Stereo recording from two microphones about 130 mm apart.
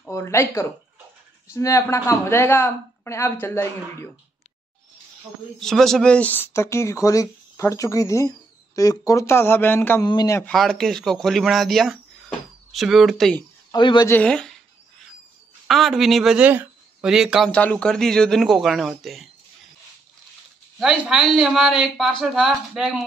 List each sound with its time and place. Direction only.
0.0 s speech: 20° left (ahead or behind)
5.6 s speech: 5° left (ahead or behind)
10.0 s speech: 30° left (ahead or behind)
10.5 s speech: 5° left (ahead or behind)
13.7 s speech: 35° left (ahead or behind)
14.0 s speech: 10° left (ahead or behind)
15.6 s speech: centre (ahead or behind)
17.5 s speech: 10° left (ahead or behind)
21.3 s speech: 5° right (ahead or behind)